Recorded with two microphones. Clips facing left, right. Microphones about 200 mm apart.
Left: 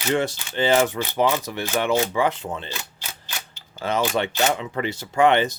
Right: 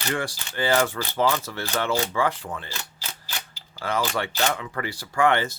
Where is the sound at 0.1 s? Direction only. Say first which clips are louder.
Left 7 dB; 20° left (ahead or behind).